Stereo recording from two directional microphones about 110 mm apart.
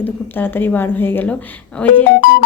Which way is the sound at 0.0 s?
15° left (ahead or behind).